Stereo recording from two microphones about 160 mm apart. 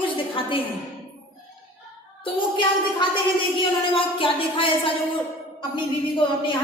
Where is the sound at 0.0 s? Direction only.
30° left (ahead or behind).